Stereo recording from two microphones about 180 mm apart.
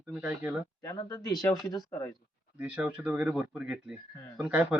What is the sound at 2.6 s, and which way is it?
Speech, 10° right (ahead or behind).